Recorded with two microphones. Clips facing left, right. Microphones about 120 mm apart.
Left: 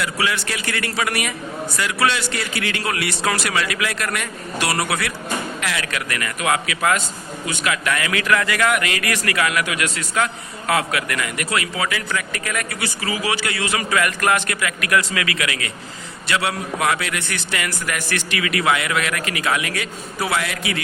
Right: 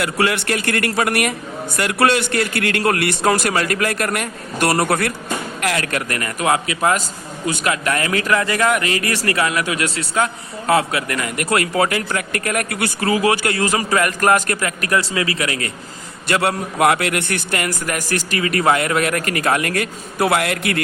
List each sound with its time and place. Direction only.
0.0 s a man's voice: 50° right (ahead or behind); by 11.3 s 30° right (ahead or behind)
11.3 s a man's voice: 50° right (ahead or behind)
16.2 s a man's voice: 50° right (ahead or behind)